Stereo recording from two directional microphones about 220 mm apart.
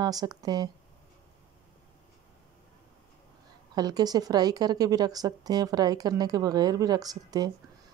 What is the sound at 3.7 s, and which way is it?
Speech, 20° right (ahead or behind).